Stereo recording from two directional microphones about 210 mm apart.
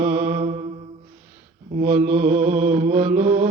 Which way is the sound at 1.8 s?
35° right (ahead or behind).